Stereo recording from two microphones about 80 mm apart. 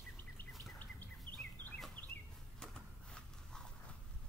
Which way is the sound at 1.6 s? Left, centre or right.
Left.